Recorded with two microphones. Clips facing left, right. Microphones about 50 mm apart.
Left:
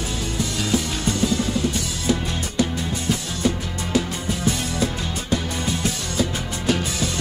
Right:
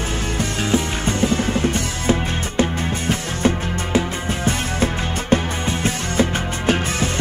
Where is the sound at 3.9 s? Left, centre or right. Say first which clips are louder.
Right 2 dB; right.